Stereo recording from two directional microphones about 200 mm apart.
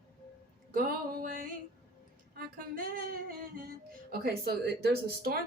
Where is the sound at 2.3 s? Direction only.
45° right (ahead or behind).